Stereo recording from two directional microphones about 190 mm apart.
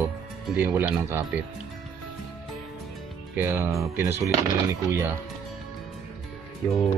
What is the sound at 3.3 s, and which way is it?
Speech, 10° right (ahead or behind).